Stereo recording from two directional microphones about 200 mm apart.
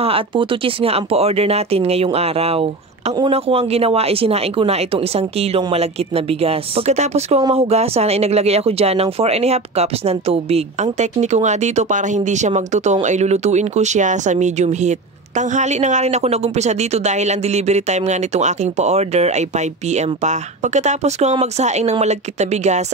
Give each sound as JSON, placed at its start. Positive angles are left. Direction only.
{"t": 0.0, "sound": "speech", "side_deg": -25}